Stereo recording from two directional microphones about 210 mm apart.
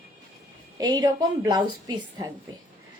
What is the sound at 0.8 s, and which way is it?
A woman's voice, 20° right (ahead or behind).